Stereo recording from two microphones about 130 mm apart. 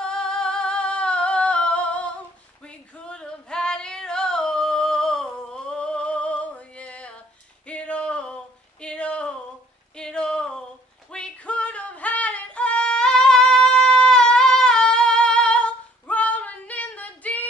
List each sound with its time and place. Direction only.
0.0 s singing: 5° left (ahead or behind)
2.6 s female singing: 10° left (ahead or behind)
7.6 s a sound: 10° left (ahead or behind)
11.1 s female singing: 5° left (ahead or behind)